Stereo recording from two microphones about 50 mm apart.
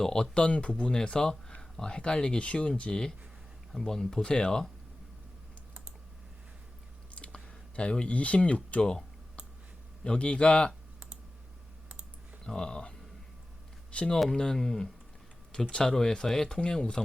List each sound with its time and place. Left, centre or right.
0.0 s speech: centre
0.3 s speech: left
7.1 s a sound: left
10.0 s speech: left
12.5 s speech: centre
13.9 s speech: left
14.3 s speech: centre